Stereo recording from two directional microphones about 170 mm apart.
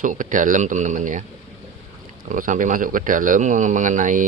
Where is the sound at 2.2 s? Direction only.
50° right (ahead or behind).